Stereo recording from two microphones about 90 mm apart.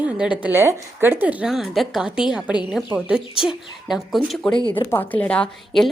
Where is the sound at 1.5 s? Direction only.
Centre (ahead or behind).